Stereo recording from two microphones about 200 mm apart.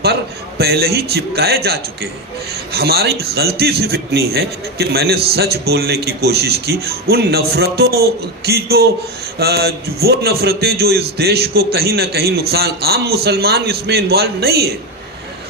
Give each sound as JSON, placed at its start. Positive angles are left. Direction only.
{"t": 0.6, "sound": "a man's voice", "side_deg": -50}